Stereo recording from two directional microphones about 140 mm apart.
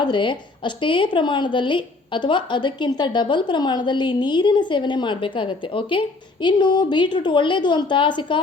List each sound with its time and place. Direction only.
0.0 s a woman's voice: 35° left (ahead or behind)